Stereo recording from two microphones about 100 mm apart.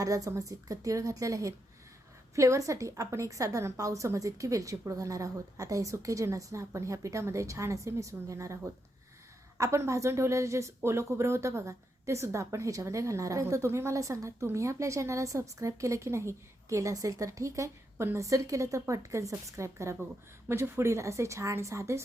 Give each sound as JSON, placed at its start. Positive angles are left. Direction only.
{"t": 0.0, "sound": "speech", "side_deg": -35}
{"t": 9.6, "sound": "a woman's voice", "side_deg": -30}